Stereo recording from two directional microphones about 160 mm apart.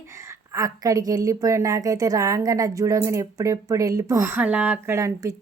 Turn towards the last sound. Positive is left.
turn(degrees=-20)  # may be behind; listen again after turning